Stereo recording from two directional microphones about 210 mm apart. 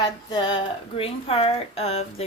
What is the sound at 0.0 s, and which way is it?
A woman's voice, 20° left (ahead or behind).